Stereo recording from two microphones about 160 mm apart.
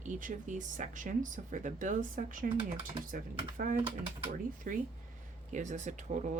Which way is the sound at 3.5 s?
60° right (ahead or behind).